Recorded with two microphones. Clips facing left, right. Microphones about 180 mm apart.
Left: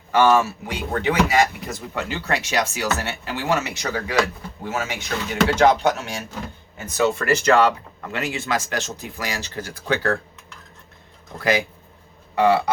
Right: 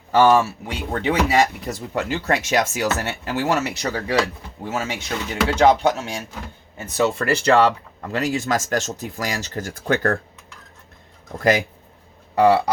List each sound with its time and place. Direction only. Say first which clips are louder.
0.1 s a man's voice: right 2 dB; 30° right (ahead or behind)
2.0 s speech: right 3 dB; 45° right (ahead or behind)
3.8 s a man's voice: right 1 dB; 30° right (ahead or behind); by 10.2 s 50° right (ahead or behind)
11.3 s speech: right 3 dB; 45° right (ahead or behind)
12.4 s a man's voice: right 2 dB; 35° right (ahead or behind)